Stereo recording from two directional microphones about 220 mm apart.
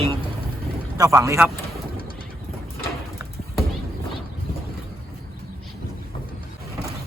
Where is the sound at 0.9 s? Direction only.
15° right (ahead or behind).